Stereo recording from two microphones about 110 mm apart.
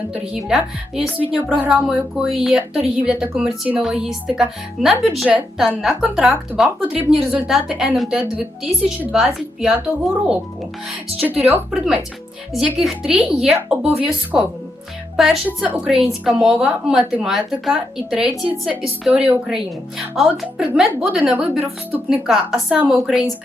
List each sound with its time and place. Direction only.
0.1 s speech: 5° right (ahead or behind)
11.2 s speech: 15° right (ahead or behind)
12.5 s speech: 5° right (ahead or behind)